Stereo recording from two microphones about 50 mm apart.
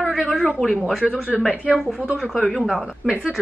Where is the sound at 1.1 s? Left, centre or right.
Right.